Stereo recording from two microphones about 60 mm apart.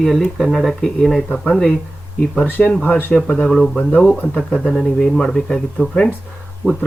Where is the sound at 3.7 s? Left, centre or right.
Centre.